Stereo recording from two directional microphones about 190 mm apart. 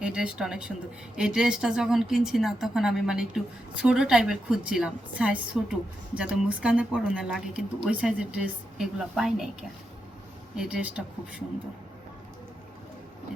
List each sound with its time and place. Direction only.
0.0 s a woman's voice: 5° right (ahead or behind)